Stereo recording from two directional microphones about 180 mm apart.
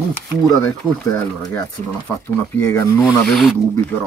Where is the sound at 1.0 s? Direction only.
15° left (ahead or behind).